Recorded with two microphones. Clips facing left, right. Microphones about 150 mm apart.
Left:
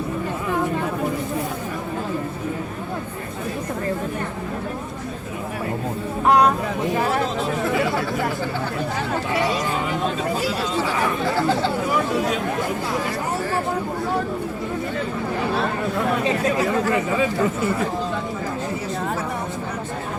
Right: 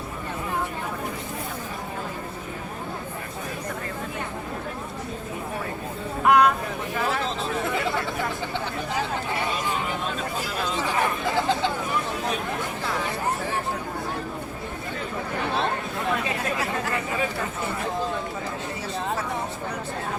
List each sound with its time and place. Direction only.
6.2 s vehicle: 35° left (ahead or behind)